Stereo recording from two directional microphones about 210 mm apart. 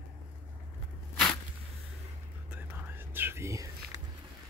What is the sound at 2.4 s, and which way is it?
Whispering, 5° right (ahead or behind).